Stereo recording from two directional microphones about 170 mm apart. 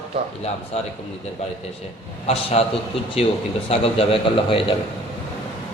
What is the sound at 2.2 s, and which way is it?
A man's voice, 35° left (ahead or behind).